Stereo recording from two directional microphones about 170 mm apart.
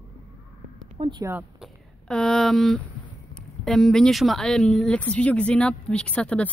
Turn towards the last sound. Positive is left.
turn(degrees=5)  # may be behind; listen again after turning